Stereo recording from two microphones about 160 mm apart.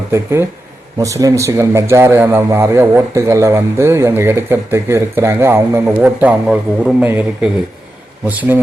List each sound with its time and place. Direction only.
0.1 s a man's voice: 15° right (ahead or behind)